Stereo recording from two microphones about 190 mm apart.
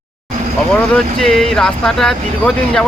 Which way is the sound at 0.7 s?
5° left (ahead or behind).